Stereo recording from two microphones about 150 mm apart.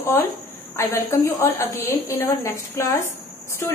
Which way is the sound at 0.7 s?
15° left (ahead or behind).